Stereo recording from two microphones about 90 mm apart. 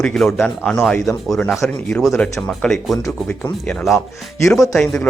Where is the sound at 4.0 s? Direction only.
30° left (ahead or behind).